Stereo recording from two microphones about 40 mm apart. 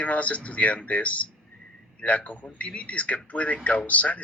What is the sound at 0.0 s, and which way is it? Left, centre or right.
A man's voice, left.